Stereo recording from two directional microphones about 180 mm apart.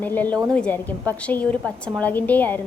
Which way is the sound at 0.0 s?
10° left (ahead or behind).